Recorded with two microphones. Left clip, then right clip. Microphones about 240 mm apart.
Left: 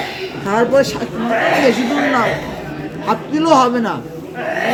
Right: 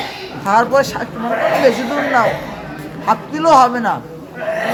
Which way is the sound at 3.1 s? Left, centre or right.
Centre.